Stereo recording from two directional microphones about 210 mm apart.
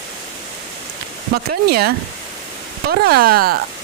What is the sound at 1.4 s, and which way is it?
Speech, 50° right (ahead or behind).